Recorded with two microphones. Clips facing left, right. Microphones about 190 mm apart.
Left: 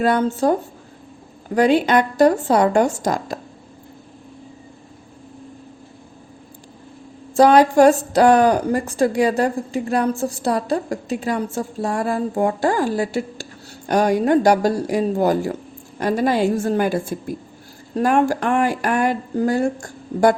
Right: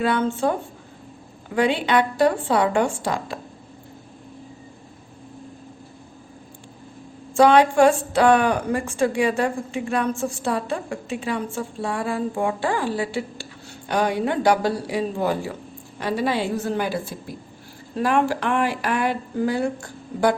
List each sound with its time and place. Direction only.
0.0 s a woman's voice: 40° left (ahead or behind)
1.5 s speech: 40° left (ahead or behind)
7.3 s a woman's voice: 40° left (ahead or behind)